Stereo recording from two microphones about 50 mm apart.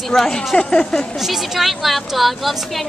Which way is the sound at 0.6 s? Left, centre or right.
Left.